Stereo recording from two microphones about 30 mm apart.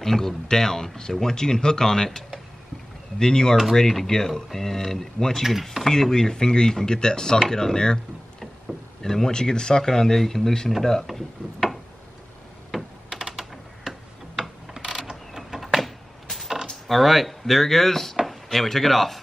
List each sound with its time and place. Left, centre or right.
0.0 s speech: centre
3.2 s speech: left
3.7 s speech: centre
5.4 s speech: centre
5.9 s speech: centre
9.0 s speech: centre
12.7 s typing: centre
14.8 s mechanisms: right
15.6 s a sound: centre
16.8 s speech: centre
18.2 s chopping: centre